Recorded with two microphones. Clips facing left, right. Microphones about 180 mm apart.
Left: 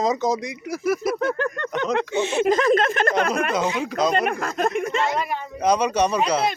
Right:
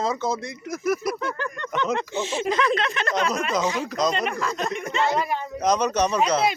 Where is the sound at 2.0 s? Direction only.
60° left (ahead or behind).